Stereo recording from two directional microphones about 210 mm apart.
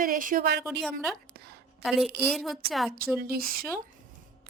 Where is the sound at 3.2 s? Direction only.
45° right (ahead or behind).